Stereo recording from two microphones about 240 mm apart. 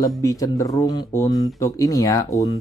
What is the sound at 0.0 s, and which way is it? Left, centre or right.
Speech, centre.